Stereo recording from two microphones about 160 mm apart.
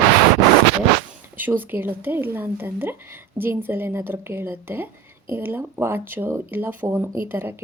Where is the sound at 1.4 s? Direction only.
10° right (ahead or behind).